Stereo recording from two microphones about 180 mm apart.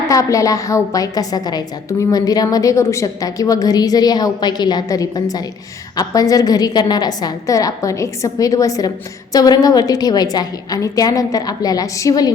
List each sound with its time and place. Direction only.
0.1 s a woman's voice: 20° left (ahead or behind)